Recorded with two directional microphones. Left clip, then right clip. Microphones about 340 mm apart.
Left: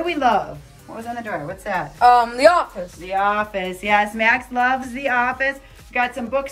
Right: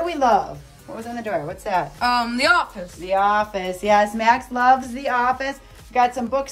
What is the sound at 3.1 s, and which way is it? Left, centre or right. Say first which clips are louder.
Speech: right 1 dB; centre.